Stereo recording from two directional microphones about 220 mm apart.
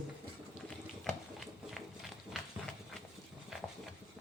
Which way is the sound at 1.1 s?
5° left (ahead or behind).